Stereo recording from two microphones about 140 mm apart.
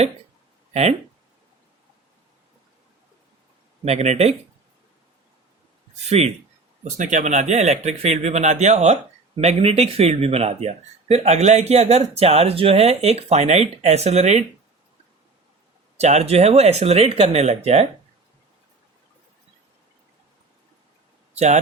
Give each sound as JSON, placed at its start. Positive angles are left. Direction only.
{"t": 0.7, "sound": "speech", "side_deg": -50}
{"t": 3.8, "sound": "speech", "side_deg": -50}
{"t": 6.1, "sound": "speech", "side_deg": -50}
{"t": 6.9, "sound": "speech", "side_deg": -60}
{"t": 16.0, "sound": "speech", "side_deg": -50}
{"t": 21.3, "sound": "speech", "side_deg": -55}